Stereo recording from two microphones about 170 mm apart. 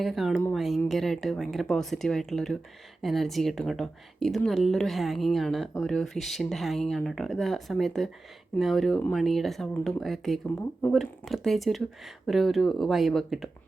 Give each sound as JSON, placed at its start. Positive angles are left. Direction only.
{"t": 0.0, "sound": "speech", "side_deg": 0}